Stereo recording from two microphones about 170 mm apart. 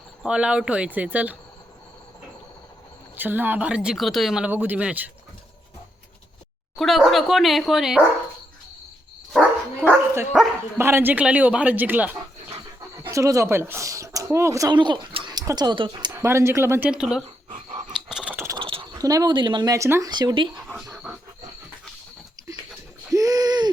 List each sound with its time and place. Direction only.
0.2 s speech: 5° right (ahead or behind)
3.2 s speech: 10° right (ahead or behind)
6.7 s speech: centre (ahead or behind)
9.8 s dog: 15° right (ahead or behind)
10.3 s speech: 5° right (ahead or behind)
10.8 s speech: 15° right (ahead or behind)
16.2 s speech: 15° right (ahead or behind)
17.5 s chewing: 45° right (ahead or behind)
18.1 s a sound: 5° right (ahead or behind)
18.4 s speech: 30° right (ahead or behind)
20.9 s wild animals: 5° right (ahead or behind)
23.1 s a sound: 20° right (ahead or behind)